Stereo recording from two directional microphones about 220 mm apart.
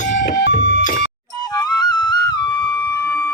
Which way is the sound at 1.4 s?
20° left (ahead or behind).